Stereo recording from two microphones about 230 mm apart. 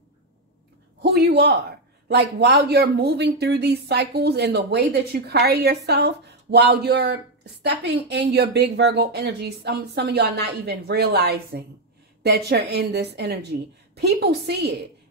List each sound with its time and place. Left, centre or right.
1.0 s a man's voice: right